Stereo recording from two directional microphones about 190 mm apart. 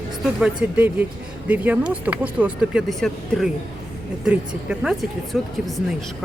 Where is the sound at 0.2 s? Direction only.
5° right (ahead or behind).